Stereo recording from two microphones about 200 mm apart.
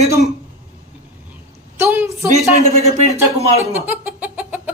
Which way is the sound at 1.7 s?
10° right (ahead or behind).